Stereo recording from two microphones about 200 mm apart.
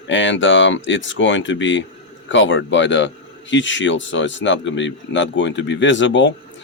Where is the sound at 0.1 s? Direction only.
70° left (ahead or behind).